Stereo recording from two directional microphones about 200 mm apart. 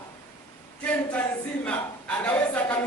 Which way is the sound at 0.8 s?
5° left (ahead or behind).